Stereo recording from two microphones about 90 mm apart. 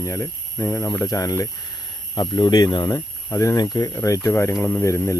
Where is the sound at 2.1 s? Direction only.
50° left (ahead or behind).